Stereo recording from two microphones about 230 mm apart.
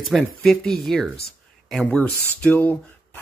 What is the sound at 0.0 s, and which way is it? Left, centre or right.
Speech, centre.